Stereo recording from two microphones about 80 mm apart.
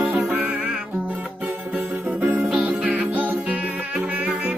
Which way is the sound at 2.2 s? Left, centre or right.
Right.